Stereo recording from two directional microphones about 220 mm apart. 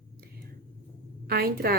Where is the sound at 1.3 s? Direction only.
45° right (ahead or behind).